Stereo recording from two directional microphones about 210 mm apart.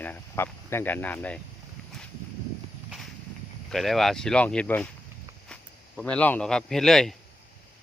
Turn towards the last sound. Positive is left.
turn(degrees=0)  # may be behind; listen again after turning